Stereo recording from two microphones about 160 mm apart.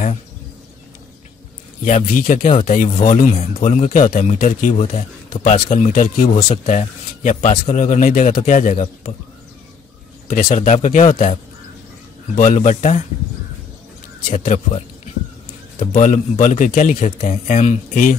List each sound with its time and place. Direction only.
1.9 s speech: 50° left (ahead or behind)
10.2 s speech: 50° left (ahead or behind)
12.4 s speech: 50° left (ahead or behind)
14.2 s speech: 55° left (ahead or behind)
15.9 s speech: 50° left (ahead or behind)